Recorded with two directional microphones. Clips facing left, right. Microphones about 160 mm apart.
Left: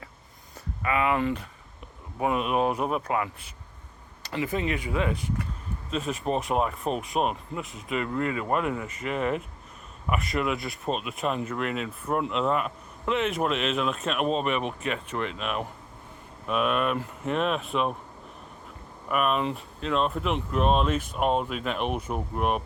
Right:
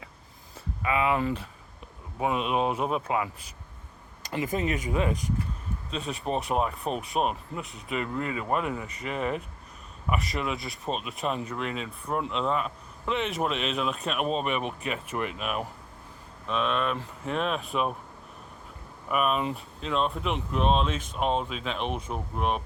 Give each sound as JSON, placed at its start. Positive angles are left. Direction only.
{"t": 2.2, "sound": "speech", "side_deg": -25}
{"t": 4.4, "sound": "speech", "side_deg": -40}
{"t": 5.9, "sound": "speech", "side_deg": 0}
{"t": 16.5, "sound": "speech", "side_deg": 10}
{"t": 19.0, "sound": "speech", "side_deg": 0}